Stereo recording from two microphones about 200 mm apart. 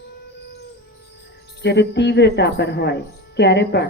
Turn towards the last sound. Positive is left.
turn(degrees=55)  # may be behind; listen again after turning